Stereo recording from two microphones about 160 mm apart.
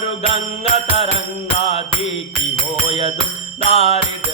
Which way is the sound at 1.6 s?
40° left (ahead or behind).